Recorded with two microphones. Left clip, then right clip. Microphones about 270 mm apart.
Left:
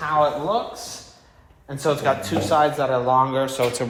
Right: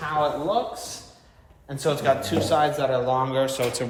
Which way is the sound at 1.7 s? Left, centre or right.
Centre.